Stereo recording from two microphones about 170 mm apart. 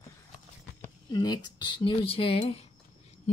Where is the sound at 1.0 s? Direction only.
25° left (ahead or behind).